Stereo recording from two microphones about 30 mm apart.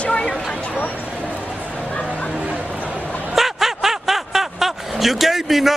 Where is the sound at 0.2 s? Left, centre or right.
Left.